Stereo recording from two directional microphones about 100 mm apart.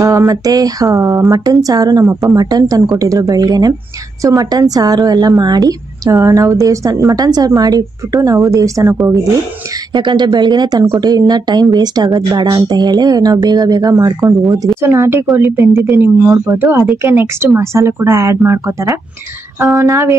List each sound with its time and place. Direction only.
0.0 s a woman's voice: 35° right (ahead or behind)
9.9 s a woman's voice: 50° right (ahead or behind); by 20.2 s 30° right (ahead or behind)